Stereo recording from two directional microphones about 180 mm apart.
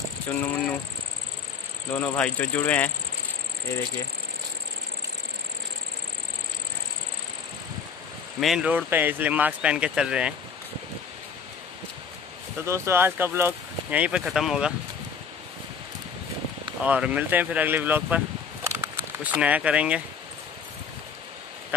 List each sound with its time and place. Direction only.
2.0 s speech: 5° left (ahead or behind)
8.4 s speech: 5° right (ahead or behind)
12.6 s speech: 15° right (ahead or behind)
16.8 s speech: 5° right (ahead or behind)
18.7 s a sound: 10° right (ahead or behind)